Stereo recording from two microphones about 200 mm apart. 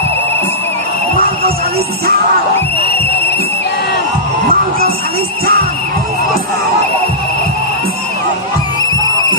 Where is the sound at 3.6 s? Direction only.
50° left (ahead or behind).